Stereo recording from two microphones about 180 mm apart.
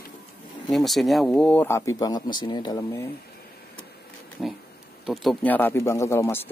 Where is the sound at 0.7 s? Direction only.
Centre (ahead or behind); by 3.1 s 20° left (ahead or behind).